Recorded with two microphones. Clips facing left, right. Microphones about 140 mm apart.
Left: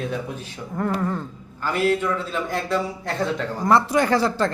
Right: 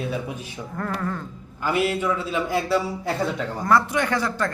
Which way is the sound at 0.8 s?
20° left (ahead or behind).